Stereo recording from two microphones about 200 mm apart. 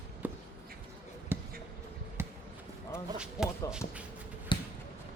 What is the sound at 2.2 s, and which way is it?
Basketball bounce, 10° right (ahead or behind).